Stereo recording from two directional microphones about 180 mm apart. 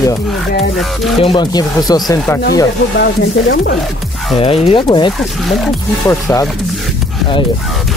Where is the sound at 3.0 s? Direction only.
70° left (ahead or behind).